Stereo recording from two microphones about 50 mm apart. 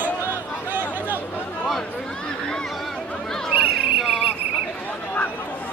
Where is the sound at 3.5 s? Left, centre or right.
Right.